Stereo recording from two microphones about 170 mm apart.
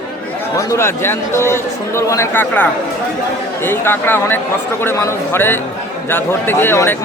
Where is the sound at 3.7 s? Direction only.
10° left (ahead or behind).